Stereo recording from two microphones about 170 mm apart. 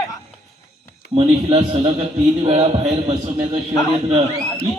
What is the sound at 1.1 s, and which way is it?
A man's voice, 30° right (ahead or behind).